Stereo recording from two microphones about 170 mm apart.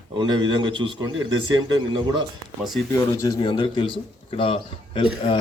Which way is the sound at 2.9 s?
20° left (ahead or behind).